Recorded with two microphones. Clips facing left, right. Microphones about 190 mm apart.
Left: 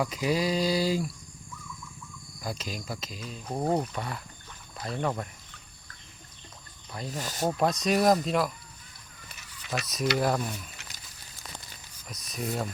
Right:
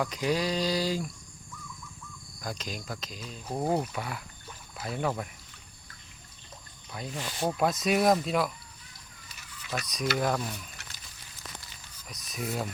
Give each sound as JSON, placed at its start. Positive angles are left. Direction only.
{"t": 0.0, "sound": "a sound", "side_deg": 5}
{"t": 2.4, "sound": "speech", "side_deg": 5}
{"t": 7.1, "sound": "speech", "side_deg": 40}
{"t": 7.4, "sound": "speech", "side_deg": 0}
{"t": 9.8, "sound": "speech", "side_deg": 5}
{"t": 12.0, "sound": "speech", "side_deg": 0}